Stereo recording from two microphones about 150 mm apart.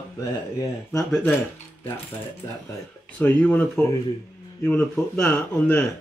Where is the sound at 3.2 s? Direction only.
10° left (ahead or behind).